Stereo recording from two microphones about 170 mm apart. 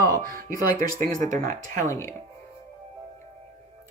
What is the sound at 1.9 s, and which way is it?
Speech, 15° left (ahead or behind).